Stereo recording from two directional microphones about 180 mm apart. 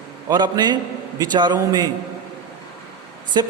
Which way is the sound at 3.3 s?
20° right (ahead or behind).